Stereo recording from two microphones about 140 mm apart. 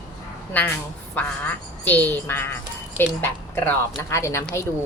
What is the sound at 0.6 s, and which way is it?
Speech, 10° left (ahead or behind).